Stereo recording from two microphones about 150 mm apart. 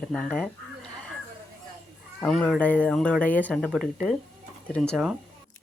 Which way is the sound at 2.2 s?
5° left (ahead or behind).